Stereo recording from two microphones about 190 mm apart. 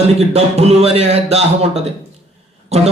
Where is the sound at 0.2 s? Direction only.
35° right (ahead or behind).